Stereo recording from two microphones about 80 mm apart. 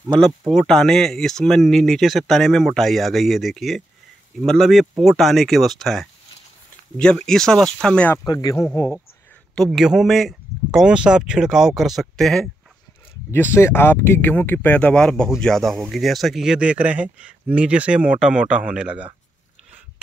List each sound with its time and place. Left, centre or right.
0.4 s speech: centre
8.3 s speech: left
9.7 s speech: centre
10.9 s speech: centre
13.3 s speech: left; by 19.0 s centre